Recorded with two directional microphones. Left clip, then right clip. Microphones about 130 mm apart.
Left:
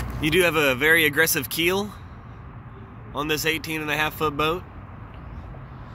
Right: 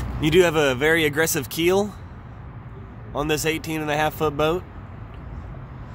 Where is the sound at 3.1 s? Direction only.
25° right (ahead or behind).